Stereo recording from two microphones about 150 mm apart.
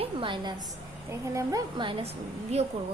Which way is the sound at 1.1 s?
20° right (ahead or behind).